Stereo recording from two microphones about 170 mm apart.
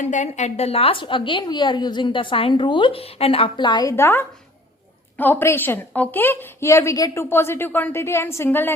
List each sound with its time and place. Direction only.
0.0 s a woman's voice: 45° left (ahead or behind); by 8.7 s 10° left (ahead or behind)